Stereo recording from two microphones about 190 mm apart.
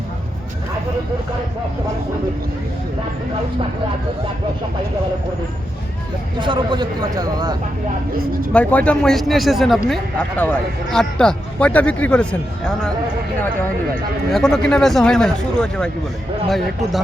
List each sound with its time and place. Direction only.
6.4 s a man's voice: 25° right (ahead or behind)
8.5 s a man's voice: 5° left (ahead or behind)
14.3 s a man's voice: centre (ahead or behind)